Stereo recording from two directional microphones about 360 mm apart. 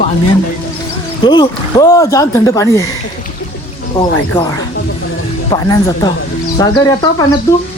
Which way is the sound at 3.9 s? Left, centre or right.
Centre.